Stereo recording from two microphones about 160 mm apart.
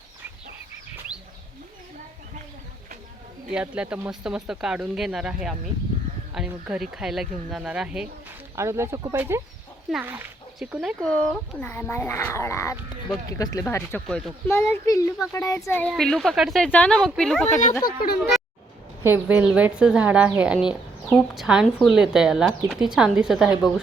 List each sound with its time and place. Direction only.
3.5 s speech: 5° right (ahead or behind)
8.5 s a woman's voice: 15° right (ahead or behind); by 15.9 s 15° left (ahead or behind)
15.9 s speech: centre (ahead or behind)
17.4 s speech: 50° left (ahead or behind)
17.8 s speech: 70° left (ahead or behind)
18.2 s a woman's voice: centre (ahead or behind)